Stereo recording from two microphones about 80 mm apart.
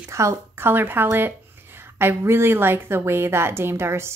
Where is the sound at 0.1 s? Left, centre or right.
Right.